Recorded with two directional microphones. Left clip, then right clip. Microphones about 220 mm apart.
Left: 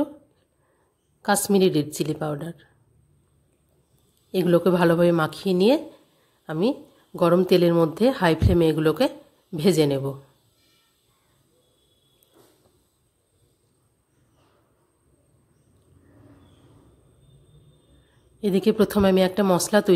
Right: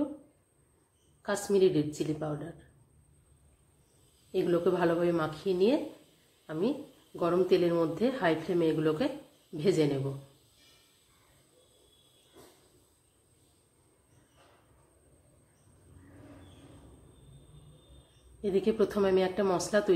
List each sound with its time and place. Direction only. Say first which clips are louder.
1.2 s speech: left 6 dB; 50° left (ahead or behind)
4.3 s speech: left 8 dB; 50° left (ahead or behind)
18.4 s speech: left 7 dB; 50° left (ahead or behind)